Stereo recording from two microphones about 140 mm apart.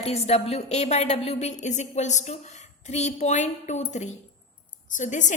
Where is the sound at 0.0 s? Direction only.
45° left (ahead or behind).